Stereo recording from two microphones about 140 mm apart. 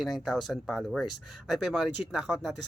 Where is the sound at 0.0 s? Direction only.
Centre (ahead or behind).